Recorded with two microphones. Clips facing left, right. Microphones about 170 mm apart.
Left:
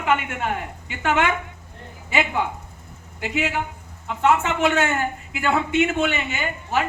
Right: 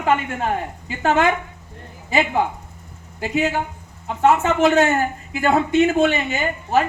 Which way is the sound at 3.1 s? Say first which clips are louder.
Right 4 dB; 35° right (ahead or behind).